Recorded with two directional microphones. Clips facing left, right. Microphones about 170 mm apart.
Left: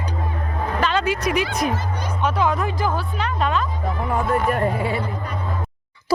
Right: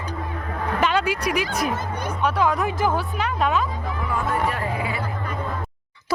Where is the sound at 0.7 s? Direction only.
15° right (ahead or behind).